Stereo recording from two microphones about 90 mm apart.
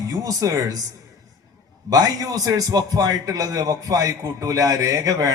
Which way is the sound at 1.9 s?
40° right (ahead or behind).